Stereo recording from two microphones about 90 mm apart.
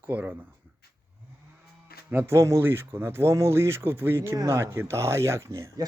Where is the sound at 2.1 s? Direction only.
25° right (ahead or behind).